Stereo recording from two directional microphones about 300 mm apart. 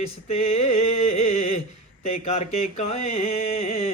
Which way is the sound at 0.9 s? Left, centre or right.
Left.